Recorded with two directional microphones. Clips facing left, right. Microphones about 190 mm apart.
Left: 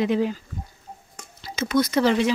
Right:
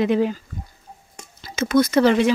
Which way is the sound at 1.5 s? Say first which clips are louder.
Right 4 dB; 50° right (ahead or behind).